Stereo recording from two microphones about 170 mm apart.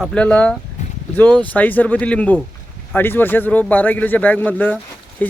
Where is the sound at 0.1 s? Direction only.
5° left (ahead or behind).